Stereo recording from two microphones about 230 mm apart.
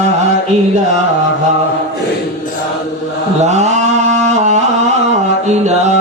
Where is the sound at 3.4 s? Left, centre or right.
Right.